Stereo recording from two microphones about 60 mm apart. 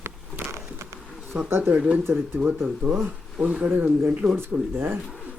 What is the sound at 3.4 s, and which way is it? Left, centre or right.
Speech, centre.